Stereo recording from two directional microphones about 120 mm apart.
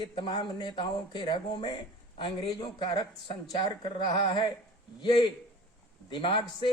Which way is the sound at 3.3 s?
40° left (ahead or behind).